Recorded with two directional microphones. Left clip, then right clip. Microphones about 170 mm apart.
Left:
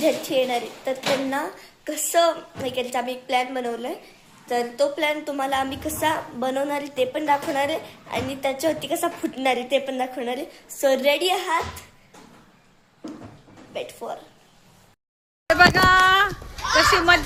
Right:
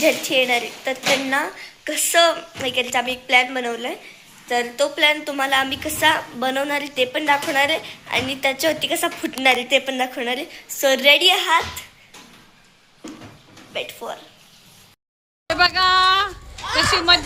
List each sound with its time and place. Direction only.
0.0 s a woman's voice: centre (ahead or behind)
13.7 s a woman's voice: centre (ahead or behind)
15.4 s speech: 15° left (ahead or behind)